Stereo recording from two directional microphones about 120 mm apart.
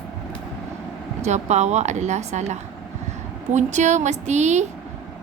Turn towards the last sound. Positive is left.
turn(degrees=-75)  # may be behind; listen again after turning